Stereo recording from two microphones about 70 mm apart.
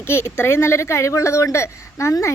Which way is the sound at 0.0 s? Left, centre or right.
Left.